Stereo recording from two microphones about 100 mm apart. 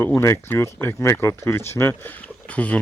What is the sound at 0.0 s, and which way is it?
Speech, 25° left (ahead or behind).